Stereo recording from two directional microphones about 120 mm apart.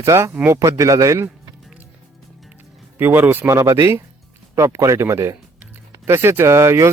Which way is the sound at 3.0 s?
15° right (ahead or behind).